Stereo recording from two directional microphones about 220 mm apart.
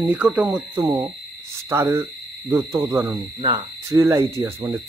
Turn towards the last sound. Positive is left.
turn(degrees=-10)  # may be behind; listen again after turning